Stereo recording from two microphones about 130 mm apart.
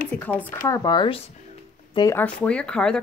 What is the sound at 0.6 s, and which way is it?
Speech, 30° left (ahead or behind).